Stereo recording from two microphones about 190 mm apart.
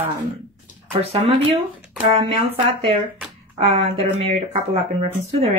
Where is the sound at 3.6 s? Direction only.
30° right (ahead or behind).